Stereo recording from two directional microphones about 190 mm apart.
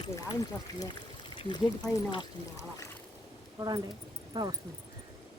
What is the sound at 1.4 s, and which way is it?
Speech, 25° left (ahead or behind).